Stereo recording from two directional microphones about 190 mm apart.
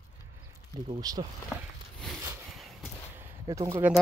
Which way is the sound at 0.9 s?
20° right (ahead or behind).